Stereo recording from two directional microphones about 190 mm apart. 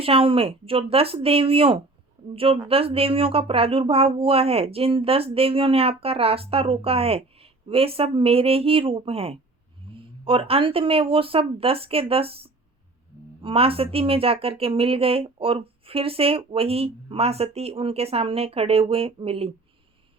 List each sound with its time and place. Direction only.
0.0 s speech: 30° right (ahead or behind)